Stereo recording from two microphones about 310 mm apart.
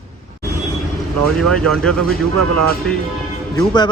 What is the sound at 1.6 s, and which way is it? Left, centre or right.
Speech, centre.